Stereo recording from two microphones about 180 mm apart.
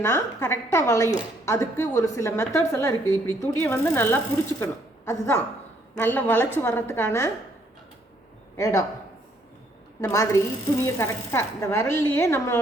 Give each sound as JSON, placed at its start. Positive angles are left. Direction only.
{"t": 0.0, "sound": "a woman's voice", "side_deg": 15}
{"t": 8.5, "sound": "speech", "side_deg": 15}
{"t": 10.0, "sound": "a woman's voice", "side_deg": 15}